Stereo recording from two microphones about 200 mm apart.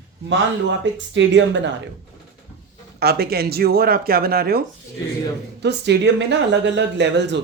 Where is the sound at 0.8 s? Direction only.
65° right (ahead or behind).